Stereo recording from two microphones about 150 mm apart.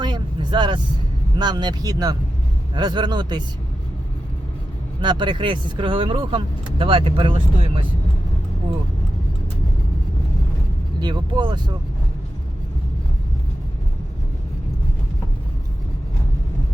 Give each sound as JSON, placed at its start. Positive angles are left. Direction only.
{"t": 0.0, "sound": "vehicle", "side_deg": -30}
{"t": 1.4, "sound": "speech", "side_deg": -30}
{"t": 4.9, "sound": "speech", "side_deg": -30}
{"t": 11.0, "sound": "speech", "side_deg": -30}